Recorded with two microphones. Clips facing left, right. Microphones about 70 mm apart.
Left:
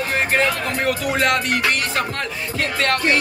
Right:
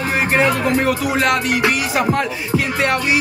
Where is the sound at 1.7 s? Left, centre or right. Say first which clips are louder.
Right 4 dB; centre.